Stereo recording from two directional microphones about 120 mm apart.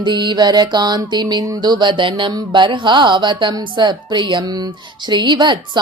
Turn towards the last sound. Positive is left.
turn(degrees=-40)  # may be behind; listen again after turning